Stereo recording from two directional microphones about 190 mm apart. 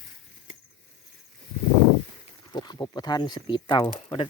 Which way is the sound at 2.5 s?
20° left (ahead or behind).